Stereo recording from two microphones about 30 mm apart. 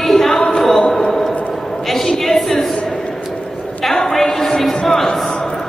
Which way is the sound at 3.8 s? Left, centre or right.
Centre.